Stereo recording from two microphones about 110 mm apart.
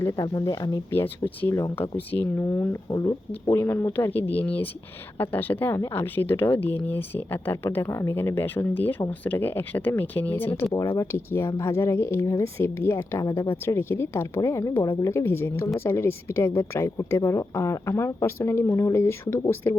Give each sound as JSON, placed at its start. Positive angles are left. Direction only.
{"t": 0.2, "sound": "speech", "side_deg": 35}
{"t": 0.9, "sound": "speech", "side_deg": 20}
{"t": 2.9, "sound": "speech", "side_deg": 35}
{"t": 10.7, "sound": "speech", "side_deg": 30}